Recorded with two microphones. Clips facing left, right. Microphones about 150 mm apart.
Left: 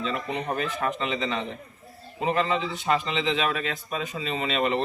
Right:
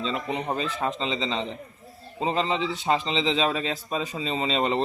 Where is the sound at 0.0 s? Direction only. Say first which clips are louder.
Right 1 dB; 20° right (ahead or behind).